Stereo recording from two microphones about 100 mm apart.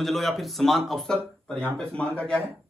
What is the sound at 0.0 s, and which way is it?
Speech, centre (ahead or behind).